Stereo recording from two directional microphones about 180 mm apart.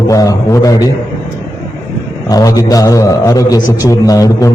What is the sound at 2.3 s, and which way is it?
A man's voice, 20° left (ahead or behind).